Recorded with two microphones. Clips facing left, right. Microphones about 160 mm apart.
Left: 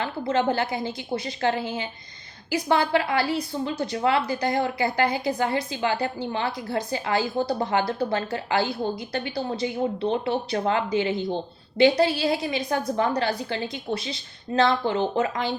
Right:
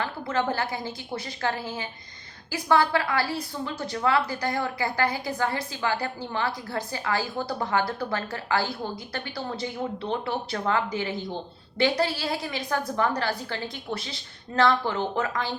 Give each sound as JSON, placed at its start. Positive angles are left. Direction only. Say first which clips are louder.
{"t": 0.0, "sound": "a woman's voice", "louder": "left 4 dB", "side_deg": 25}